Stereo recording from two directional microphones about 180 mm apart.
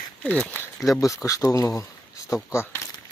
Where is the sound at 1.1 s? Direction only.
20° left (ahead or behind).